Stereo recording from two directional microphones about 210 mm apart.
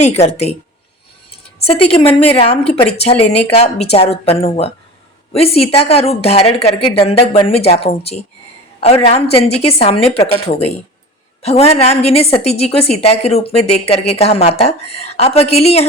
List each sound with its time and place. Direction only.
0.0 s a woman's voice: 30° left (ahead or behind)
2.4 s a woman's voice: 25° left (ahead or behind)